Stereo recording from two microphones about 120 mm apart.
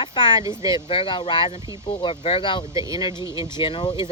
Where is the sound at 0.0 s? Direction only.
40° left (ahead or behind).